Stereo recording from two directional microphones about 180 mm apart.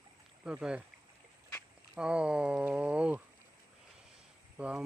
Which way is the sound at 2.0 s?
5° right (ahead or behind).